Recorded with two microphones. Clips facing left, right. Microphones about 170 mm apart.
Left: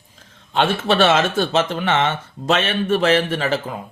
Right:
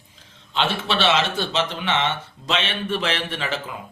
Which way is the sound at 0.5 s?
50° left (ahead or behind).